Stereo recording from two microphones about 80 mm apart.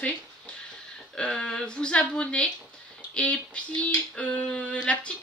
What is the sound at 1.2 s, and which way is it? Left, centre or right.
Speech, centre.